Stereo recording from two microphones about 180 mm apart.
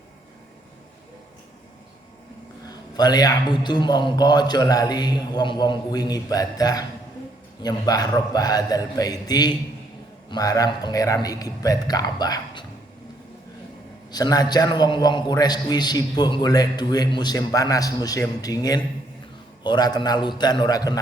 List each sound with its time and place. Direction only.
2.9 s a man's voice: 20° left (ahead or behind)
14.1 s a man's voice: 20° left (ahead or behind)